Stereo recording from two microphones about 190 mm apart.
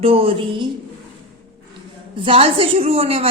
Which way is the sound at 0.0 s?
30° right (ahead or behind).